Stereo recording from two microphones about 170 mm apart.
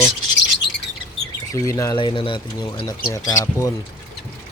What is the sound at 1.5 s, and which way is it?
Speech, 20° left (ahead or behind).